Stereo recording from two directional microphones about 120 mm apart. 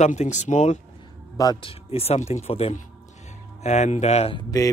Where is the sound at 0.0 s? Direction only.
75° left (ahead or behind).